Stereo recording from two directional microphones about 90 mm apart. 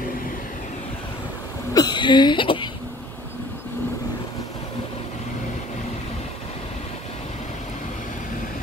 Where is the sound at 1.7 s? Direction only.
50° left (ahead or behind).